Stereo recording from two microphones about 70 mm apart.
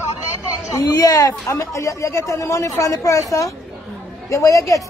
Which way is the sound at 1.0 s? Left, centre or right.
Left.